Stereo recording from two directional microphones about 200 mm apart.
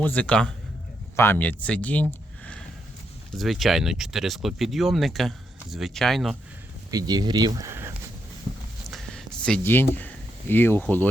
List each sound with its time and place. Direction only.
0.0 s speech: 5° left (ahead or behind)
6.9 s speech: 20° right (ahead or behind)
8.9 s a sound: 5° left (ahead or behind)